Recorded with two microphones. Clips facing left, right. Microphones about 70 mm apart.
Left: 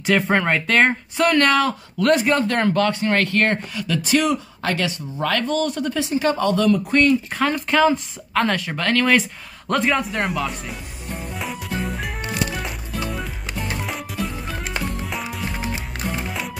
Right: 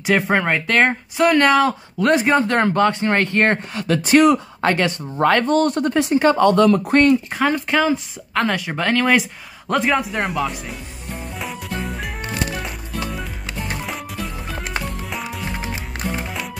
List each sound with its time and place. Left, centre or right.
0.0 s speech: centre
3.7 s speech: right
4.0 s speech: right
6.9 s speech: right
7.3 s speech: centre
8.6 s speech: centre
11.3 s music: centre